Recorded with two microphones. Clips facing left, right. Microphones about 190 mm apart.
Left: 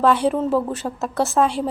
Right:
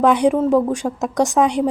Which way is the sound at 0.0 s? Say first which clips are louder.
Right 3 dB; 15° right (ahead or behind).